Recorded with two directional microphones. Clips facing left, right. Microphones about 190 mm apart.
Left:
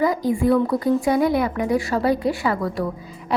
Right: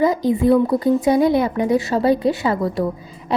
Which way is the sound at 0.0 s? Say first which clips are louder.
Right 3 dB; 25° right (ahead or behind).